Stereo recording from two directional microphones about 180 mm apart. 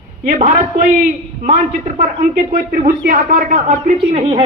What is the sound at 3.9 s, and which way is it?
Speech, 35° right (ahead or behind).